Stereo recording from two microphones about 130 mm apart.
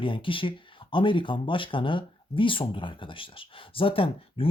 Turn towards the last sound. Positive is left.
turn(degrees=45)  # may be behind; listen again after turning